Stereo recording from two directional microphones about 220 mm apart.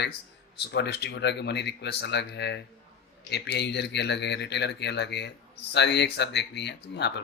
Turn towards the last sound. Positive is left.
turn(degrees=50)  # may be behind; listen again after turning